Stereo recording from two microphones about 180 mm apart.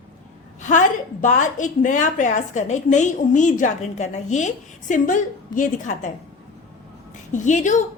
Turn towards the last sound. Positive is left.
turn(degrees=45)  # may be behind; listen again after turning